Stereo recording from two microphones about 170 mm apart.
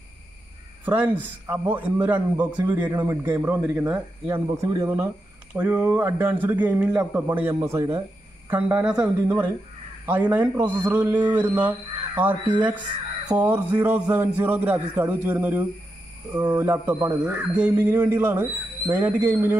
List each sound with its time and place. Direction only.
0.8 s a man's voice: 10° right (ahead or behind)